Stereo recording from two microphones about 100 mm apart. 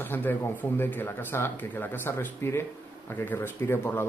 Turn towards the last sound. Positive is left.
turn(degrees=25)  # may be behind; listen again after turning